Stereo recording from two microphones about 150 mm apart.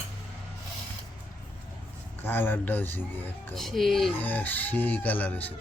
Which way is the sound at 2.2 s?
15° left (ahead or behind).